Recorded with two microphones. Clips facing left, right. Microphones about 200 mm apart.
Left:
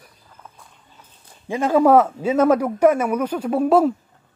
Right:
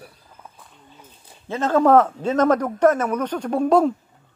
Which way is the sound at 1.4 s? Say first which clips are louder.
Left 2 dB; 10° left (ahead or behind).